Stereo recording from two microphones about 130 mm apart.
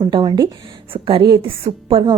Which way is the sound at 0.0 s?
40° right (ahead or behind).